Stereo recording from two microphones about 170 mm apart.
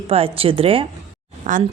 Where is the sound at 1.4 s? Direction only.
50° right (ahead or behind).